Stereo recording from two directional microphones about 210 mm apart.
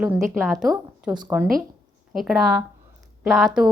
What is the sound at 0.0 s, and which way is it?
A woman's voice, centre (ahead or behind).